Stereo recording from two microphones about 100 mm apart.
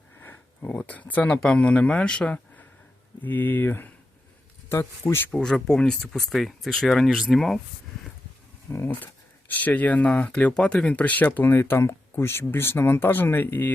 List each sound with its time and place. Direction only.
0.2 s speech: 20° left (ahead or behind)
5.0 s speech: 20° left (ahead or behind)
5.4 s speech: 5° left (ahead or behind)
8.7 s speech: 20° left (ahead or behind)